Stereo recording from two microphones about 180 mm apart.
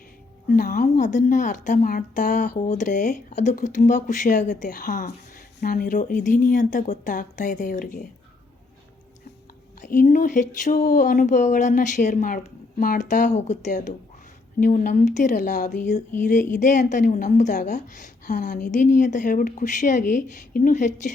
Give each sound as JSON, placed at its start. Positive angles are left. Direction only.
{"t": 0.4, "sound": "a woman's voice", "side_deg": 50}
{"t": 9.9, "sound": "a woman's voice", "side_deg": 55}